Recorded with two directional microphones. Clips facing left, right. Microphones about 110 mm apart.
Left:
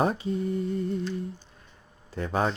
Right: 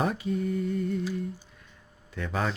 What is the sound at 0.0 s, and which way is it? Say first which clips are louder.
Speech: left 2 dB; 30° left (ahead or behind).